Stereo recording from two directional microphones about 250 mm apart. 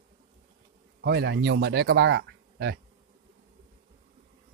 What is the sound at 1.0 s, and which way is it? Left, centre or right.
Speech, right.